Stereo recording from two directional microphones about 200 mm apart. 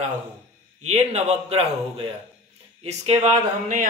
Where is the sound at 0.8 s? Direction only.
35° right (ahead or behind).